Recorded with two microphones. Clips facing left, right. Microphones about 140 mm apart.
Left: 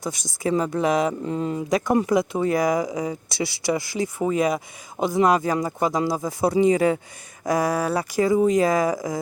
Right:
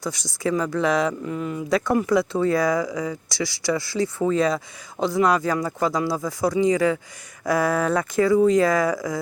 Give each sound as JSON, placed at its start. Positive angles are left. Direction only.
{"t": 0.0, "sound": "speech", "side_deg": 20}